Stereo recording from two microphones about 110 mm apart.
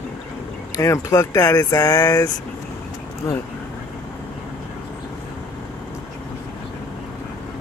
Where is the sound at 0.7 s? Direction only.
30° left (ahead or behind).